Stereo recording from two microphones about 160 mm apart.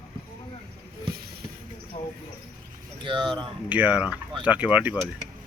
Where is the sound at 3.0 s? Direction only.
30° right (ahead or behind).